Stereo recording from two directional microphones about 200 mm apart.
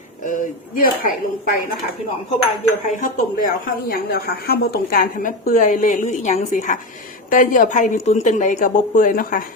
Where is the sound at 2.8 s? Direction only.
40° left (ahead or behind).